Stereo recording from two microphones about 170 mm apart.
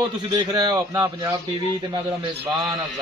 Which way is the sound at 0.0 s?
25° right (ahead or behind).